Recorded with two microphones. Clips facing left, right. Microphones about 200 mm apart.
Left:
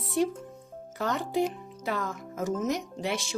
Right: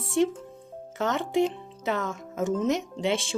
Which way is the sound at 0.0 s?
25° right (ahead or behind).